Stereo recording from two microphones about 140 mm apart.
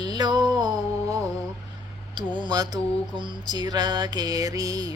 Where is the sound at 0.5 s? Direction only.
30° right (ahead or behind).